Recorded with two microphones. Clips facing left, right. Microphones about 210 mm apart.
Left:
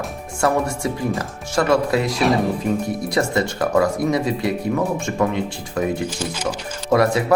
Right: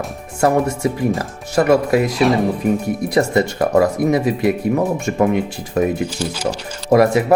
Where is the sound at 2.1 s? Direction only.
Centre (ahead or behind).